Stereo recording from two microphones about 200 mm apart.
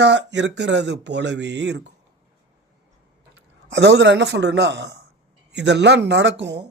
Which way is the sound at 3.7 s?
60° right (ahead or behind).